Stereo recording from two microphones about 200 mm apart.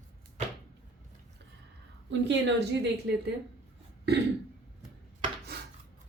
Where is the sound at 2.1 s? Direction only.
60° right (ahead or behind).